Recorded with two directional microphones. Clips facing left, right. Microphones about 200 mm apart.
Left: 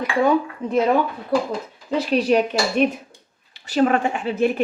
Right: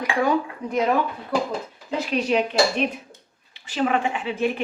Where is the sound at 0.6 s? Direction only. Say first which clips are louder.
Left 4 dB; 25° left (ahead or behind).